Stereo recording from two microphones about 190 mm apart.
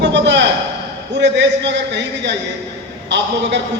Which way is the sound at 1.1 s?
65° right (ahead or behind).